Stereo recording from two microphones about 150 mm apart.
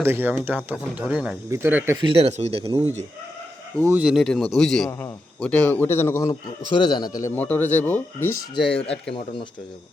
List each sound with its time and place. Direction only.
0.0 s speech: 15° right (ahead or behind)
1.5 s speech: 15° right (ahead or behind)
2.0 s speech: 40° right (ahead or behind)
3.8 s speech: 15° right (ahead or behind)
4.0 s a man's voice: centre (ahead or behind)
4.9 s a man's voice: 15° left (ahead or behind)
6.7 s a man's voice: 30° left (ahead or behind)
7.3 s a man's voice: 10° left (ahead or behind)
9.1 s speech: 35° left (ahead or behind)